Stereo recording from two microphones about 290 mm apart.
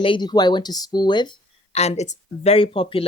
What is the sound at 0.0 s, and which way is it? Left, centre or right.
Speech, centre.